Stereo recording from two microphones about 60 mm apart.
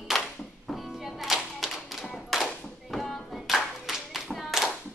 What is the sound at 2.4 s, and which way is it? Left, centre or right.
Clapping, centre.